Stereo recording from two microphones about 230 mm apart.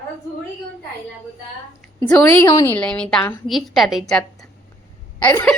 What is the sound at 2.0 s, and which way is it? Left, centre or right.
A woman's voice, centre.